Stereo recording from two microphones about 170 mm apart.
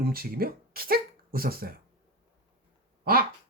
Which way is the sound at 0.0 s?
60° right (ahead or behind).